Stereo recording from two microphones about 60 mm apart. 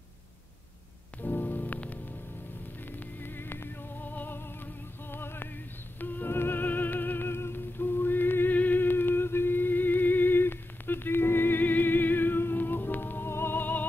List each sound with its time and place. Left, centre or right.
1.2 s music: left
3.2 s music: left